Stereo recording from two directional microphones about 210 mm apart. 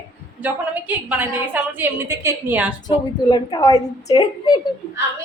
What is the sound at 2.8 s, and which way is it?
A woman's voice, 20° left (ahead or behind).